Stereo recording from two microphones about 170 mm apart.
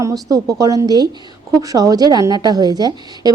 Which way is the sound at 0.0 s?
20° right (ahead or behind).